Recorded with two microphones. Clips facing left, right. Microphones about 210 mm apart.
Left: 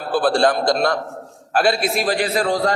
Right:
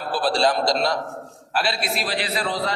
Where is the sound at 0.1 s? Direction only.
55° left (ahead or behind).